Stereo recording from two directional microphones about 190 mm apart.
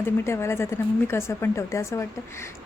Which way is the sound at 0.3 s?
15° left (ahead or behind).